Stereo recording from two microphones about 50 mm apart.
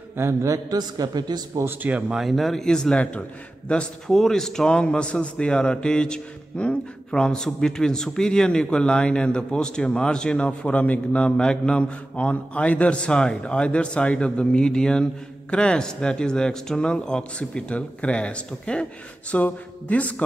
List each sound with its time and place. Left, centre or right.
0.1 s a sound: right
1.9 s speech: right
2.1 s speech: centre
3.0 s a man's voice: left
4.1 s a man's voice: centre; by 20.2 s left